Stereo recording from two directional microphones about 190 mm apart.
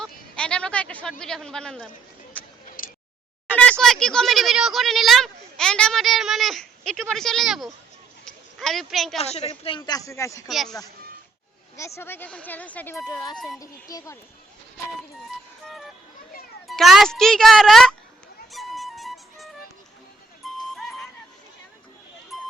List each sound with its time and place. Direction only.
0.0 s speech: 5° left (ahead or behind)
3.5 s speech: 5° left (ahead or behind)
8.2 s a sound: centre (ahead or behind)
9.1 s a woman's voice: 35° left (ahead or behind); by 10.5 s 15° left (ahead or behind)
10.5 s speech: centre (ahead or behind)
11.8 s speech: 15° left (ahead or behind)
13.3 s speech: centre (ahead or behind)
13.6 s speech: 20° left (ahead or behind)
15.6 s music: centre (ahead or behind)
16.6 s speech: centre (ahead or behind)
18.5 s music: centre (ahead or behind)
22.3 s a sound: centre (ahead or behind)